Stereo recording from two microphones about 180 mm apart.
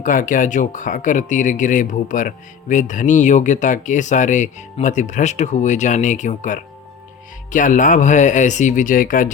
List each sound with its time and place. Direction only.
0.0 s speech: 45° left (ahead or behind)